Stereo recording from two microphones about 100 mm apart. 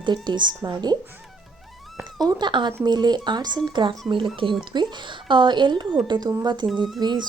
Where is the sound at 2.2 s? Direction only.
45° right (ahead or behind).